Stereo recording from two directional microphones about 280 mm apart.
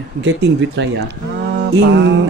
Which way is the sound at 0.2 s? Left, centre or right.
Right.